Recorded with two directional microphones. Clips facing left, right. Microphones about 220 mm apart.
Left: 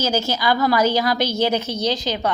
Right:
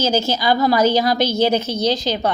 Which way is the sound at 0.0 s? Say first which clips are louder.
Right 3 dB; 20° right (ahead or behind).